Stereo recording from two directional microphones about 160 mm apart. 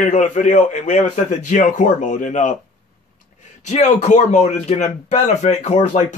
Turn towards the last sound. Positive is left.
turn(degrees=45)  # may be behind; listen again after turning